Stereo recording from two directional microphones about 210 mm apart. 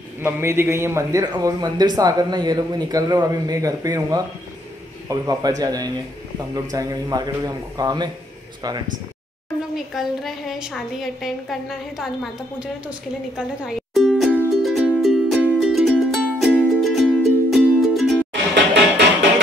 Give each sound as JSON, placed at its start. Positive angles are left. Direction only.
{"t": 0.2, "sound": "a man's voice", "side_deg": -10}
{"t": 9.9, "sound": "a woman's voice", "side_deg": 0}
{"t": 13.7, "sound": "music", "side_deg": 0}
{"t": 18.3, "sound": "music", "side_deg": -55}